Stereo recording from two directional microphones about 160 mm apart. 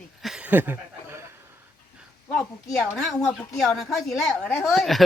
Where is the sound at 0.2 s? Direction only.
5° right (ahead or behind).